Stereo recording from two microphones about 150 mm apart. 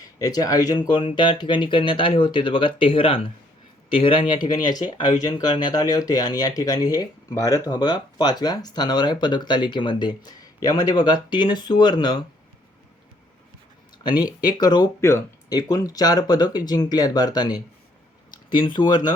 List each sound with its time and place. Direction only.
0.2 s speech: 25° left (ahead or behind)
14.0 s speech: 30° left (ahead or behind)
18.6 s speech: 30° left (ahead or behind)